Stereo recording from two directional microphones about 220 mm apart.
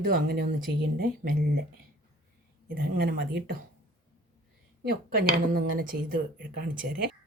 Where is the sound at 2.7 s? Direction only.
45° right (ahead or behind).